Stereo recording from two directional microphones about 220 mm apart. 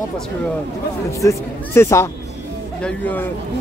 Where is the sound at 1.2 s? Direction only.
10° left (ahead or behind).